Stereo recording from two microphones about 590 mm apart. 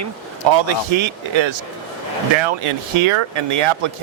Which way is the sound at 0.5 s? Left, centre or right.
Right.